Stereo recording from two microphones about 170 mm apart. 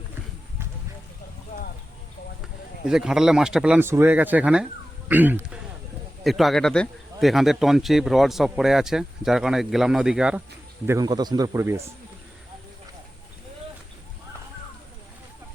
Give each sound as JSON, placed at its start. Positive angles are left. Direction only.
{"t": 2.8, "sound": "speech", "side_deg": -5}
{"t": 6.2, "sound": "speech", "side_deg": 0}
{"t": 10.8, "sound": "speech", "side_deg": -20}